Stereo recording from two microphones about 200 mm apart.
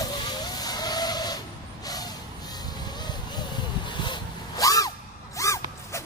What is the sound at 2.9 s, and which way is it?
Vehicle, 20° left (ahead or behind).